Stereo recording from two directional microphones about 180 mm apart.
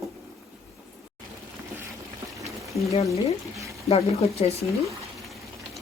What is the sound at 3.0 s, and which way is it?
Speech, 15° right (ahead or behind).